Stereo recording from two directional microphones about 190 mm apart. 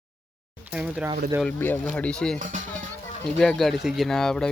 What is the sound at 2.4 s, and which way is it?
Speech, 40° right (ahead or behind).